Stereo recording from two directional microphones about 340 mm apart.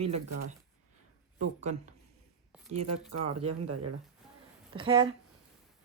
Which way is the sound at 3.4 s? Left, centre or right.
Right.